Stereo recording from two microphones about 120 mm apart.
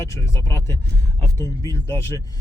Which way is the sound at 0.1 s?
25° left (ahead or behind).